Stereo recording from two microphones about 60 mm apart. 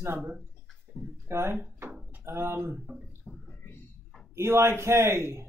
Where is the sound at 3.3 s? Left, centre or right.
Left.